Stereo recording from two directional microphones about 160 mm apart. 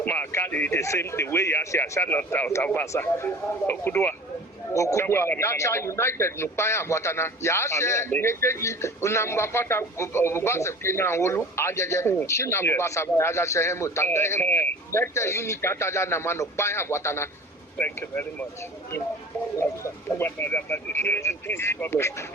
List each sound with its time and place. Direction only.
0.0 s a man's voice: 10° left (ahead or behind)
19.5 s a man's voice: 15° left (ahead or behind)